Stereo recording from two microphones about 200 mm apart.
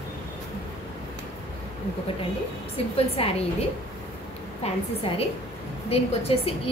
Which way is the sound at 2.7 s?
30° left (ahead or behind).